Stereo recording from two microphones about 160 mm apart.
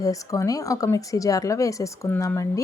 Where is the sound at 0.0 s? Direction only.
20° left (ahead or behind).